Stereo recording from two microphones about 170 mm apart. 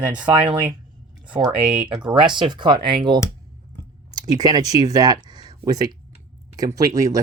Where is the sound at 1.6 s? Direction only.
5° right (ahead or behind).